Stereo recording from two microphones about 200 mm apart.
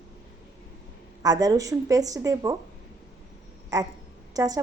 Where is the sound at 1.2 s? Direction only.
20° right (ahead or behind).